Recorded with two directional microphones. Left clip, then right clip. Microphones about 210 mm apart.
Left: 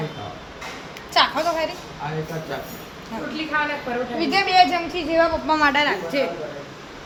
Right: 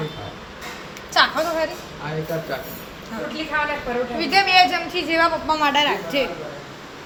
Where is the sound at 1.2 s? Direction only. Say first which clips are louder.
Right 1 dB; 20° left (ahead or behind).